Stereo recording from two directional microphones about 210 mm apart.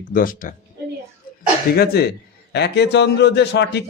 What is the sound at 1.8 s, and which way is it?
A man's voice, 50° left (ahead or behind).